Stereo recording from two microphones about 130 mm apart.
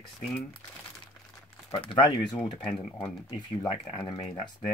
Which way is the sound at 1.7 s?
40° left (ahead or behind).